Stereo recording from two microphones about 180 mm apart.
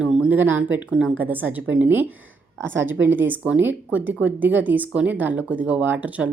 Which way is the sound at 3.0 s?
10° right (ahead or behind).